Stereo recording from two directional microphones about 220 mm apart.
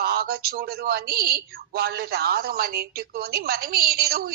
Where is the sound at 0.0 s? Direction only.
45° right (ahead or behind).